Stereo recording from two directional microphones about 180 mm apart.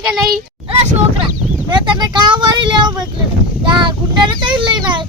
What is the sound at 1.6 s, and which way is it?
Speech, 25° right (ahead or behind).